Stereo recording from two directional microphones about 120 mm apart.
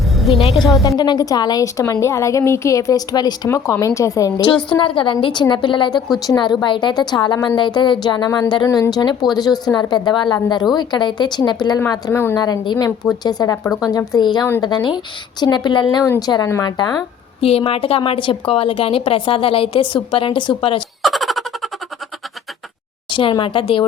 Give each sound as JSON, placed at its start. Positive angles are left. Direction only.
{"t": 0.2, "sound": "a woman's voice", "side_deg": 0}
{"t": 0.9, "sound": "a woman's voice", "side_deg": 35}
{"t": 4.8, "sound": "a woman's voice", "side_deg": 45}
{"t": 12.1, "sound": "a woman's voice", "side_deg": 20}
{"t": 12.4, "sound": "a woman's voice", "side_deg": 35}
{"t": 17.4, "sound": "a woman's voice", "side_deg": 55}
{"t": 21.0, "sound": "baby laughter", "side_deg": 0}
{"t": 23.1, "sound": "a woman's voice", "side_deg": 45}